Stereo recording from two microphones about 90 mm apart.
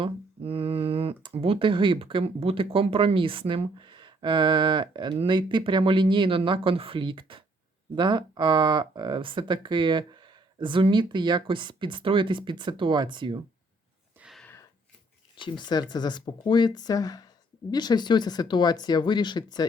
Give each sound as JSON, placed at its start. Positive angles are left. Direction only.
{"t": 0.0, "sound": "speech", "side_deg": -85}
{"t": 7.9, "sound": "speech", "side_deg": -55}
{"t": 15.4, "sound": "speech", "side_deg": 60}